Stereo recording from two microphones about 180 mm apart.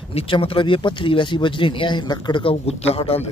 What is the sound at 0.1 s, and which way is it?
Speech, 30° left (ahead or behind).